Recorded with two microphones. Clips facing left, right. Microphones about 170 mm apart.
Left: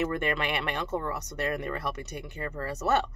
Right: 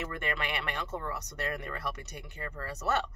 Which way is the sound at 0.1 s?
25° left (ahead or behind).